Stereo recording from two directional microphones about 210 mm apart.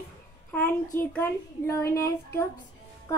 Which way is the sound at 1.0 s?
10° left (ahead or behind).